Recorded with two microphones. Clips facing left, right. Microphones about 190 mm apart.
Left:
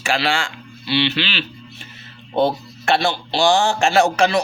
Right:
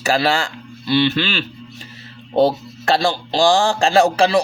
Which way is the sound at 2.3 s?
35° right (ahead or behind).